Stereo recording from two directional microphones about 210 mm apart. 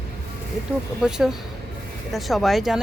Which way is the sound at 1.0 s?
Centre (ahead or behind).